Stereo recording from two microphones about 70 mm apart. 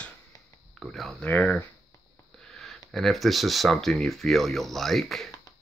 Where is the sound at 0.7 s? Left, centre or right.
Centre.